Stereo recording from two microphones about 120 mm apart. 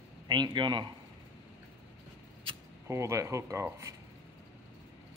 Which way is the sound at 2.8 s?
25° right (ahead or behind).